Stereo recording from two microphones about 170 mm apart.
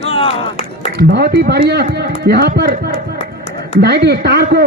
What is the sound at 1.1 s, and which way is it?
A man's voice, 75° right (ahead or behind).